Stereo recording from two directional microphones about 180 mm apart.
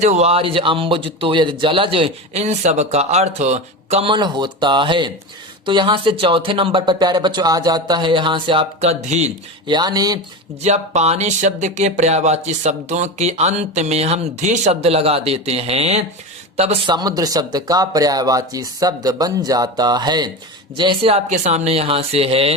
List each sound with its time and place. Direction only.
0.0 s speech: 40° right (ahead or behind)
9.6 s speech: 25° right (ahead or behind)
10.6 s speech: 40° right (ahead or behind)